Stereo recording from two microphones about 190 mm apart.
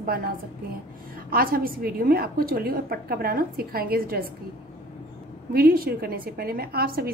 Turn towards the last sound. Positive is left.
turn(degrees=-55)  # may be behind; listen again after turning